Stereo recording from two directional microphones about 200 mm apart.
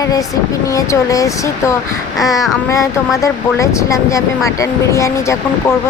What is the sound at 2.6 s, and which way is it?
A child's voice, 15° left (ahead or behind).